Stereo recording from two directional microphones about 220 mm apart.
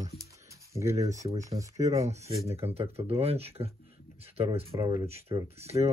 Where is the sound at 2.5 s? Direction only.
25° right (ahead or behind).